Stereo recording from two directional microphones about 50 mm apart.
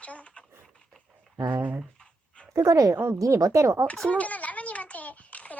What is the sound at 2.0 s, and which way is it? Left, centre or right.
Dog, centre.